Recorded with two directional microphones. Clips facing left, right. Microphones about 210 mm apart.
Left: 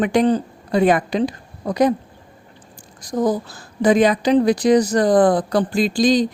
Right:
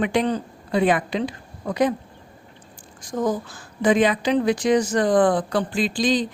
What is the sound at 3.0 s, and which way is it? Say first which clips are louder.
Speech: left 4 dB; 35° left (ahead or behind).